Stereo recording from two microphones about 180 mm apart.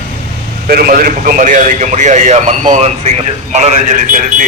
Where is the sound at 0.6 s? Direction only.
55° right (ahead or behind).